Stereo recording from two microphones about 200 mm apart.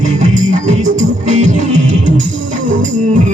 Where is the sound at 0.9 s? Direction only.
40° right (ahead or behind).